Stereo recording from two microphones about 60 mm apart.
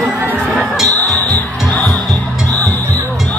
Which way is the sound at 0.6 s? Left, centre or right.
Centre.